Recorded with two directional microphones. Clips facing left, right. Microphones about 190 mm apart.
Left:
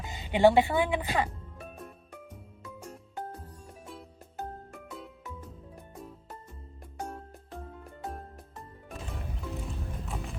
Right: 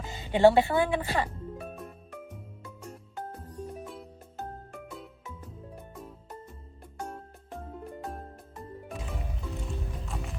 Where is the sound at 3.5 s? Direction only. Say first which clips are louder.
Right 7 dB; centre (ahead or behind).